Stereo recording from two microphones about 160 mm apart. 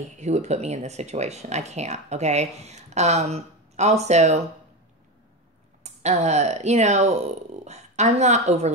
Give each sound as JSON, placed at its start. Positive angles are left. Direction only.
{"t": 0.2, "sound": "speech", "side_deg": -45}
{"t": 5.9, "sound": "speech", "side_deg": -45}